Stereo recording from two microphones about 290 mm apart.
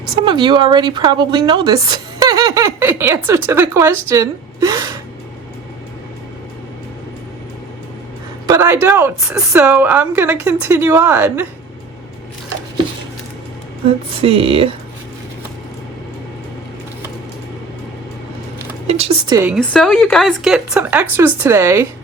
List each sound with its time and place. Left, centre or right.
0.3 s a woman's voice: centre
8.4 s a woman's voice: centre
14.2 s speech: centre
18.9 s a sound: right
19.4 s speech: centre